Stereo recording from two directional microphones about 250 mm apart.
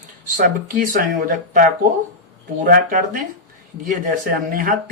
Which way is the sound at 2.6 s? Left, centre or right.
Right.